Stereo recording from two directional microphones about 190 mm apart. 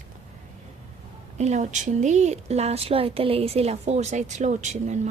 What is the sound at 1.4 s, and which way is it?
A woman's voice, 35° right (ahead or behind).